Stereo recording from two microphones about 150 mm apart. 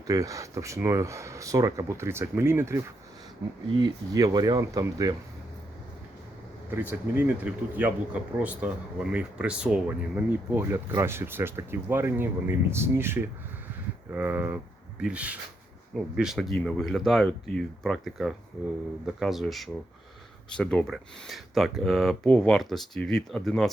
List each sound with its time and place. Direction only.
0.1 s speech: 20° right (ahead or behind)
7.2 s speech: 10° right (ahead or behind)